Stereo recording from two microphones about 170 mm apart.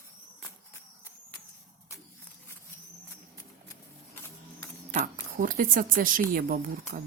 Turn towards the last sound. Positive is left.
turn(degrees=-55)  # may be behind; listen again after turning